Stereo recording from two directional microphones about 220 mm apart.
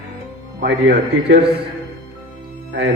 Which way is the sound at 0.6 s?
45° right (ahead or behind).